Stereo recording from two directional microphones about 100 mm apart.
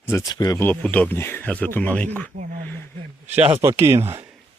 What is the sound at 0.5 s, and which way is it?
Speech, 20° left (ahead or behind).